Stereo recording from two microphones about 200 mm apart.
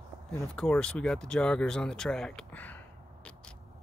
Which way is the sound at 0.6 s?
5° left (ahead or behind).